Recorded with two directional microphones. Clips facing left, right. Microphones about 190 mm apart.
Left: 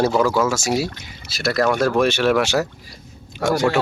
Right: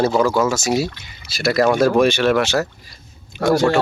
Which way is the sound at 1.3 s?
Centre (ahead or behind).